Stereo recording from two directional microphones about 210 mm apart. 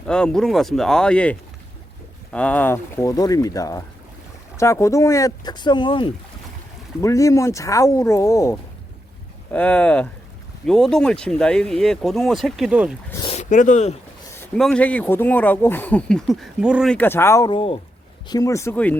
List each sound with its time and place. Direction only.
0.1 s speech: 5° left (ahead or behind)
13.2 s a sound: 30° left (ahead or behind)
14.3 s speech: 5° left (ahead or behind)